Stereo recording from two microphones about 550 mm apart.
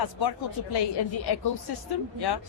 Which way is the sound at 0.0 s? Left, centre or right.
Left.